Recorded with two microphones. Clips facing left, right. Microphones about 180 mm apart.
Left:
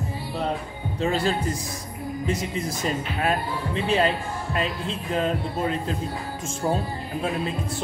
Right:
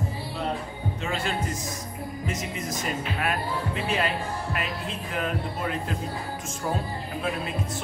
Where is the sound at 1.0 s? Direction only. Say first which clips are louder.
Left 7 dB; 35° left (ahead or behind).